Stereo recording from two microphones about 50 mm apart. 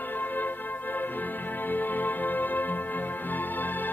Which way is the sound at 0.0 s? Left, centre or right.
Left.